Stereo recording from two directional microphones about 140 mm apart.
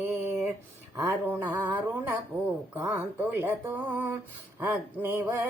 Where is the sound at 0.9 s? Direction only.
15° right (ahead or behind).